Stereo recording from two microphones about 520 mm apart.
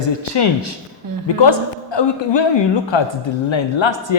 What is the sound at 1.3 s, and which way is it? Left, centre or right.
Speech, left.